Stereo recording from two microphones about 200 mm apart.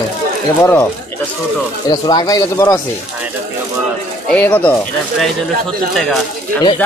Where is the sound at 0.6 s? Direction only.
10° left (ahead or behind).